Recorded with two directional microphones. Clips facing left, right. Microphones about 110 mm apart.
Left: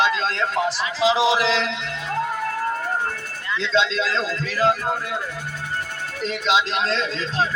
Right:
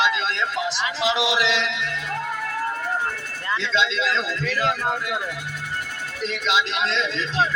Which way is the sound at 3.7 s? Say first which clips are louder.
Left 3 dB; 35° left (ahead or behind).